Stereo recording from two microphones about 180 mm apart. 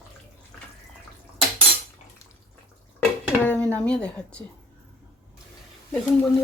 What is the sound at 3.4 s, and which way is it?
Dishes, 10° left (ahead or behind).